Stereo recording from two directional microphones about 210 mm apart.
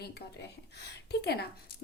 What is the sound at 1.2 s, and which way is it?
Speech, 50° left (ahead or behind).